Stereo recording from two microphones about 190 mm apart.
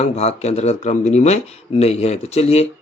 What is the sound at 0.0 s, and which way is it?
Speech, 35° left (ahead or behind).